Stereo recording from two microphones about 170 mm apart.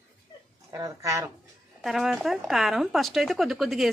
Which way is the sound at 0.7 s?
20° right (ahead or behind).